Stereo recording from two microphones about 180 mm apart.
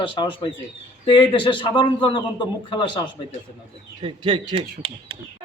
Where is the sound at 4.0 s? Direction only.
30° right (ahead or behind).